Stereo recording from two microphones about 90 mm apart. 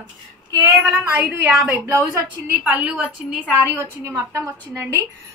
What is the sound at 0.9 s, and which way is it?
Speech, 15° right (ahead or behind).